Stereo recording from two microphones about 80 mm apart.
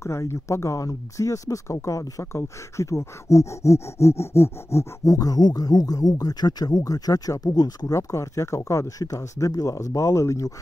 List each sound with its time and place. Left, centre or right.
0.0 s speech: left
7.8 s speech: left